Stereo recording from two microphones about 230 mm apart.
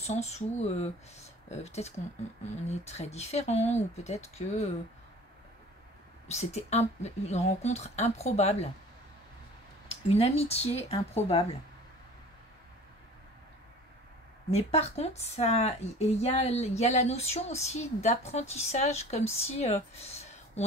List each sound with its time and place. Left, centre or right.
0.0 s a woman's voice: left
6.2 s a woman's voice: left
10.0 s a woman's voice: left
14.5 s a woman's voice: left